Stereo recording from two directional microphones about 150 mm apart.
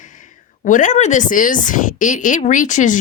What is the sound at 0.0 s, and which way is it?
Speech, 60° left (ahead or behind).